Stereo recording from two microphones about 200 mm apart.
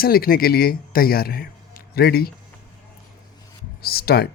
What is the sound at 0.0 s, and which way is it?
Speech, 50° left (ahead or behind).